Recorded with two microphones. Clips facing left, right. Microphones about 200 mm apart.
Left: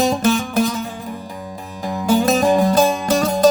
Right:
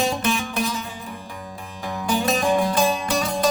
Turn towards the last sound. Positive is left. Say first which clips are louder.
# left 6 dB
turn(degrees=40)  # may be behind; listen again after turning